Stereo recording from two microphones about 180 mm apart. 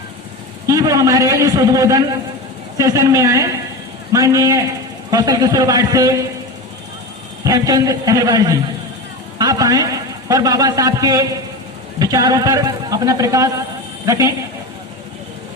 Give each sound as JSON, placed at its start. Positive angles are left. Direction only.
{"t": 0.7, "sound": "a man's voice", "side_deg": -20}
{"t": 7.4, "sound": "a man's voice", "side_deg": -20}